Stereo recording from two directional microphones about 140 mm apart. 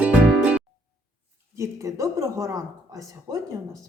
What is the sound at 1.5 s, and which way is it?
Speech, 20° right (ahead or behind).